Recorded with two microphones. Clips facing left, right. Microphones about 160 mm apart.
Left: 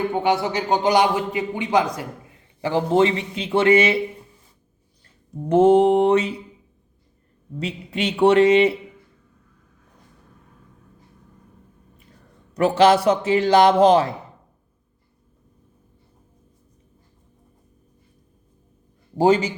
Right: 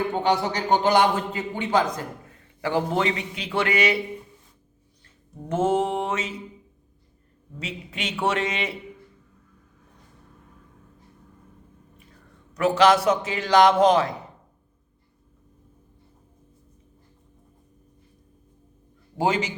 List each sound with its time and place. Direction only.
0.1 s a man's voice: 15° left (ahead or behind)
2.6 s speech: 25° left (ahead or behind)
5.5 s a man's voice: 35° left (ahead or behind)
7.6 s a man's voice: 30° left (ahead or behind)
12.5 s a man's voice: 30° left (ahead or behind)
19.1 s a man's voice: 35° left (ahead or behind)